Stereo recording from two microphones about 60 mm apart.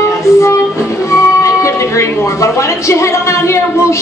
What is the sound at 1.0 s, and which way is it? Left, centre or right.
Speech, left.